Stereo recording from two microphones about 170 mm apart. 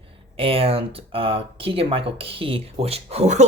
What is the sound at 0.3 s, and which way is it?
Speech, 35° right (ahead or behind).